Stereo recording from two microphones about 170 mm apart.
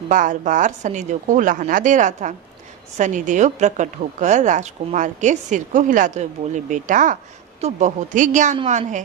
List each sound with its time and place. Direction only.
0.1 s a woman's voice: 50° right (ahead or behind)
8.5 s a woman's voice: 35° right (ahead or behind)